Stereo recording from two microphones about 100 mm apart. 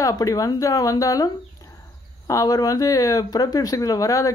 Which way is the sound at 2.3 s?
40° left (ahead or behind).